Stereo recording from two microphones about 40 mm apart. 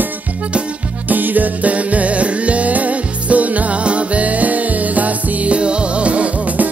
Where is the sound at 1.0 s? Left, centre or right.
Right.